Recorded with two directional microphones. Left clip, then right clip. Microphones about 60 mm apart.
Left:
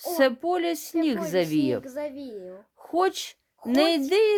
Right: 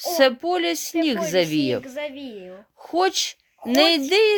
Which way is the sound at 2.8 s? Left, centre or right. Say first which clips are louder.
Right 4 dB; left.